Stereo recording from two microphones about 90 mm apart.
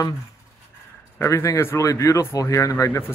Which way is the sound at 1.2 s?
30° left (ahead or behind).